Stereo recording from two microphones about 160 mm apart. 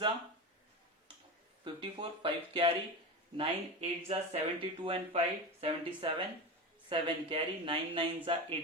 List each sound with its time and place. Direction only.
1.6 s speech: 30° right (ahead or behind)
3.3 s speech: 45° right (ahead or behind)